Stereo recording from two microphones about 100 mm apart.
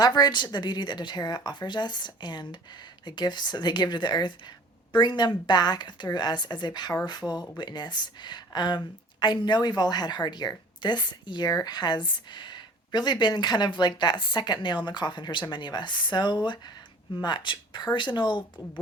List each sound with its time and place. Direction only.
0.0 s speech: 40° left (ahead or behind)